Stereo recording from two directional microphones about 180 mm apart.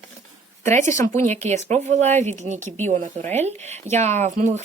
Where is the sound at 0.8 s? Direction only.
15° left (ahead or behind).